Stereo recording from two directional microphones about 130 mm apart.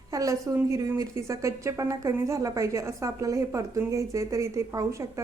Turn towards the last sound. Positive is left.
turn(degrees=-25)  # may be behind; listen again after turning